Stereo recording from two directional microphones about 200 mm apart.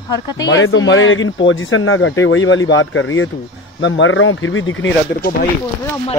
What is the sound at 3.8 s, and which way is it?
Speech, 70° left (ahead or behind).